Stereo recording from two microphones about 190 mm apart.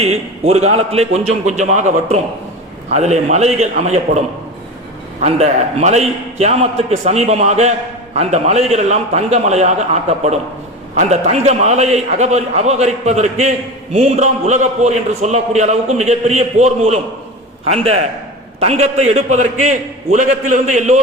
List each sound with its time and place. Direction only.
0.0 s a man's voice: 35° right (ahead or behind)
5.2 s a man's voice: 35° right (ahead or behind)